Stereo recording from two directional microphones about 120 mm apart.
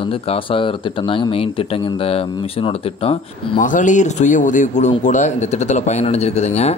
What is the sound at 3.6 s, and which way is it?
Speech, 90° left.